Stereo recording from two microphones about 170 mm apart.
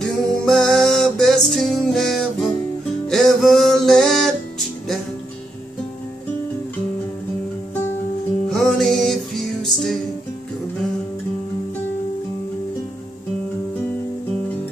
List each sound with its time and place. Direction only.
0.0 s music: 5° left (ahead or behind)
8.5 s music: 5° left (ahead or behind)